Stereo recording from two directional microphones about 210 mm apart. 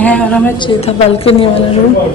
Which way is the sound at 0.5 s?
25° left (ahead or behind).